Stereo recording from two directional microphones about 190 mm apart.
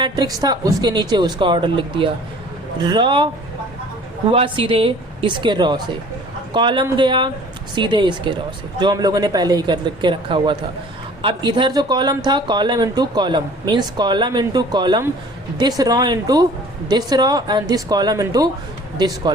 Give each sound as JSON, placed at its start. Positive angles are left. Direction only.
{"t": 0.0, "sound": "speech", "side_deg": -20}
{"t": 4.3, "sound": "speech", "side_deg": -30}